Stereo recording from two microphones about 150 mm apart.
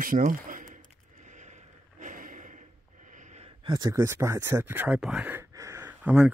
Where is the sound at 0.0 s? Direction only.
65° right (ahead or behind); by 3.5 s 50° right (ahead or behind).